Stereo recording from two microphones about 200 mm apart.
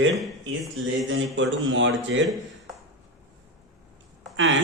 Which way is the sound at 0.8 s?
70° right (ahead or behind).